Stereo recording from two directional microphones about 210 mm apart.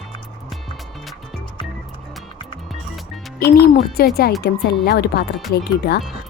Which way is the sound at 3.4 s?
45° left (ahead or behind).